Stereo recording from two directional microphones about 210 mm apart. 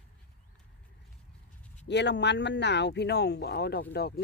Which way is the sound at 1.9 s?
55° left (ahead or behind).